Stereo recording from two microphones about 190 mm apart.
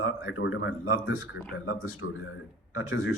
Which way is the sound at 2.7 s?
90° left.